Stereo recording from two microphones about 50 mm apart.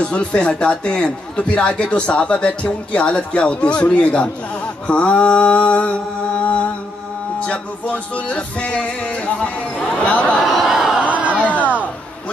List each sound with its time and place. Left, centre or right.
0.0 s a man's voice: left
10.3 s a sound: centre
11.0 s crowd: right